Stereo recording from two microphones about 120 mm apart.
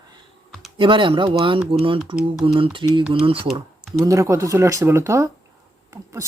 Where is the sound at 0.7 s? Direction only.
45° right (ahead or behind).